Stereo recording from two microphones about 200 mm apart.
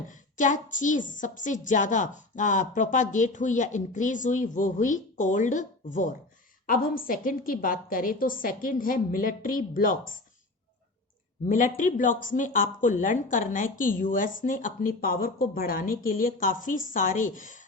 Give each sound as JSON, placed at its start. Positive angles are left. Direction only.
{"t": 0.1, "sound": "a woman's voice", "side_deg": 40}
{"t": 11.4, "sound": "a woman's voice", "side_deg": 40}